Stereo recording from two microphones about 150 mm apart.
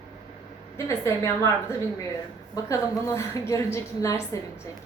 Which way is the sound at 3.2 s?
20° left (ahead or behind).